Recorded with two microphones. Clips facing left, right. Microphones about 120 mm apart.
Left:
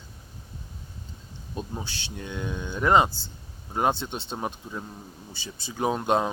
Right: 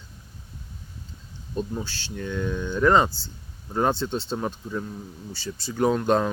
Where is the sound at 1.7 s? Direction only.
20° left (ahead or behind).